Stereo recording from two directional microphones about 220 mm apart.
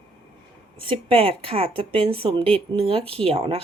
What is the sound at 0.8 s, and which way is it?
Speech, 25° right (ahead or behind).